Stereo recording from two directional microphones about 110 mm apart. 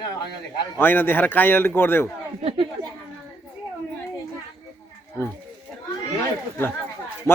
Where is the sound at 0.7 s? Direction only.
20° left (ahead or behind).